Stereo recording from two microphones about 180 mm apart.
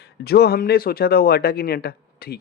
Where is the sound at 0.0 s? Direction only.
60° left (ahead or behind).